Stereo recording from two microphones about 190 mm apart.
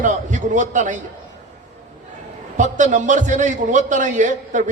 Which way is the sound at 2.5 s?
40° right (ahead or behind).